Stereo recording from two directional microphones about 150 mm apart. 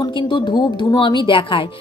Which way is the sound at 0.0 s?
30° left (ahead or behind).